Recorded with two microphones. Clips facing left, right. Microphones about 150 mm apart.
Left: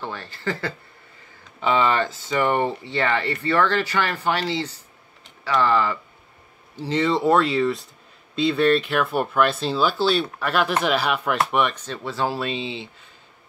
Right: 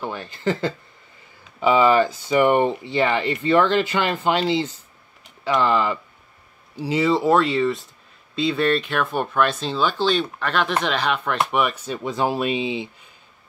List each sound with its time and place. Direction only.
0.0 s speech: 15° right (ahead or behind)
1.6 s speech: 10° right (ahead or behind)